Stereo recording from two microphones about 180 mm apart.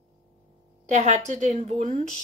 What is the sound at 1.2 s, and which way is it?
Speech, 40° right (ahead or behind).